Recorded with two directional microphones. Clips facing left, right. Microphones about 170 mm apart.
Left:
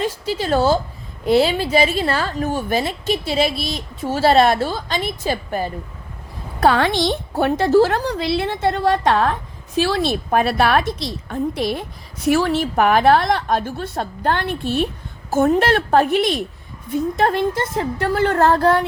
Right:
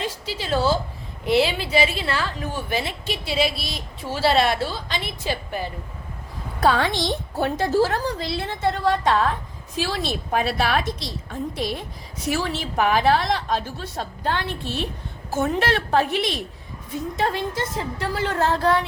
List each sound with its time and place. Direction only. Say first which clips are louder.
0.0 s a woman's voice: left 7 dB; 50° left (ahead or behind)
6.6 s a woman's voice: left 4 dB; 65° left (ahead or behind)